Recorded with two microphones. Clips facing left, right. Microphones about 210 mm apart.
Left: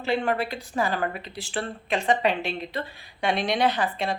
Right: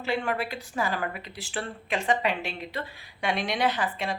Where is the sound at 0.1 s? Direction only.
25° left (ahead or behind).